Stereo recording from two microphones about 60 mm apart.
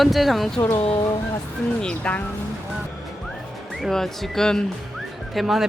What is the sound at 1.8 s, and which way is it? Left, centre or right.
Speech, centre.